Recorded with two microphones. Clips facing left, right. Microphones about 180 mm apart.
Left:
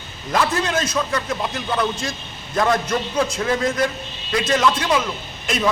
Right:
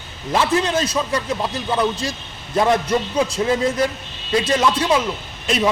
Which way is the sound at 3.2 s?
35° right (ahead or behind).